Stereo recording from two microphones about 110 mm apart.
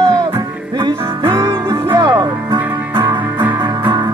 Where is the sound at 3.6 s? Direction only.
40° right (ahead or behind).